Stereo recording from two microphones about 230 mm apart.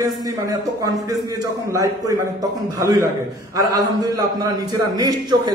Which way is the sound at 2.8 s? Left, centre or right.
Centre.